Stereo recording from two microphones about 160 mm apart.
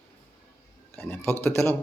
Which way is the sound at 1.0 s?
10° left (ahead or behind).